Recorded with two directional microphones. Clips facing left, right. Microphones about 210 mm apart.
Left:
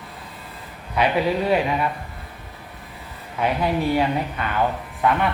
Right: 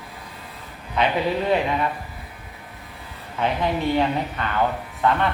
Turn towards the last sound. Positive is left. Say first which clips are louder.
# even
turn(degrees=10)  # may be behind; listen again after turning